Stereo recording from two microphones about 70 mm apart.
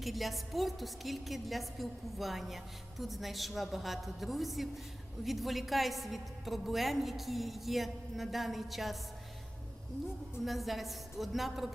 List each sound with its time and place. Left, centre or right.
0.0 s a woman's voice: centre
10.4 s a woman's voice: centre